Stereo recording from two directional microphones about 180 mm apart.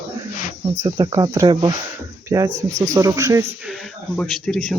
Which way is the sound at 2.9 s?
20° right (ahead or behind).